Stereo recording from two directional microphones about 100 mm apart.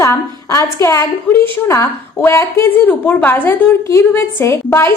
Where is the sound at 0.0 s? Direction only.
30° left (ahead or behind).